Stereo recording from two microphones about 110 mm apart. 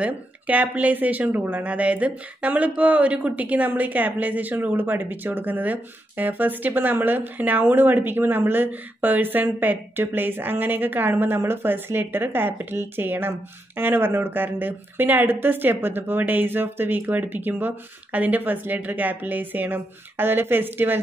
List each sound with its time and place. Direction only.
0.0 s speech: 15° right (ahead or behind)